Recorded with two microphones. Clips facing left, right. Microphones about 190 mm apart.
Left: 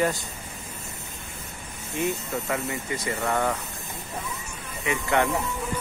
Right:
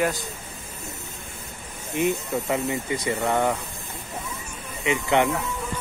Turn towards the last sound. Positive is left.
turn(degrees=-20)  # may be behind; listen again after turning